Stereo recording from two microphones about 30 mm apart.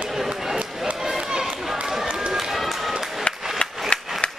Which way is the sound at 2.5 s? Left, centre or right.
Centre.